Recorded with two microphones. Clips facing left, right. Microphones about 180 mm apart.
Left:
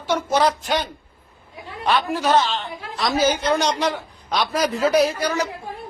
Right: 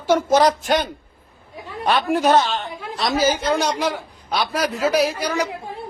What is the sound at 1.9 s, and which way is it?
A man's voice, 50° right (ahead or behind).